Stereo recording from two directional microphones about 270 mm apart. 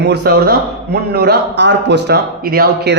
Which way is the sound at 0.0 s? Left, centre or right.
Right.